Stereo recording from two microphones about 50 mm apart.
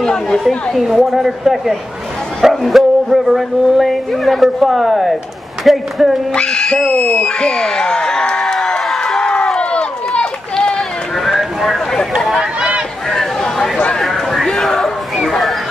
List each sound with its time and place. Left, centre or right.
0.0 s chatter: centre
0.7 s speech: centre
6.3 s speech: centre
9.6 s run: centre
11.1 s a sound: centre
12.4 s a sound: centre
13.1 s chatter: centre